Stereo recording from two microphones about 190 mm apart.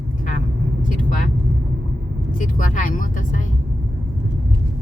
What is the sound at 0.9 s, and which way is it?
Vehicle, 45° left (ahead or behind).